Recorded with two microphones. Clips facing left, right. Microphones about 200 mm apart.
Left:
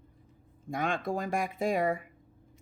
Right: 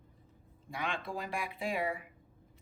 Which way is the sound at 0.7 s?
45° left (ahead or behind).